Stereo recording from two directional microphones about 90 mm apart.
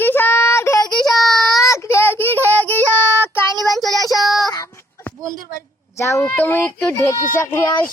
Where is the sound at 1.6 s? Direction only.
35° left (ahead or behind).